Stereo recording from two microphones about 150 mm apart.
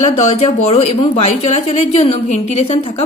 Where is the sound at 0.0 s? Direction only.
45° left (ahead or behind).